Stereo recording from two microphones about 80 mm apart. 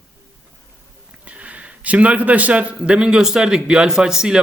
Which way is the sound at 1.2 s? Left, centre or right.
Centre.